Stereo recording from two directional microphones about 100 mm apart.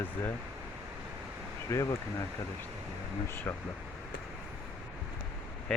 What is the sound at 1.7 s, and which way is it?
Speech, 30° left (ahead or behind).